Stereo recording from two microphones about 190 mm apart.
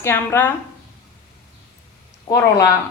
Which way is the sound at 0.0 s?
15° left (ahead or behind).